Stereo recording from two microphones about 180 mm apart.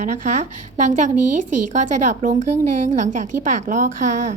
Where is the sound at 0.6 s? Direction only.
45° right (ahead or behind).